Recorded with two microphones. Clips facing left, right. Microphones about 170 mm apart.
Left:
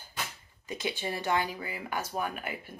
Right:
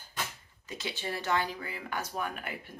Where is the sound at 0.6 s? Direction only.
15° left (ahead or behind).